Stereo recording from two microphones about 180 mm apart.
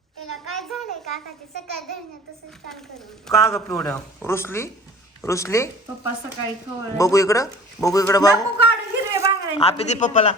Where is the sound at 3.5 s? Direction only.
15° left (ahead or behind).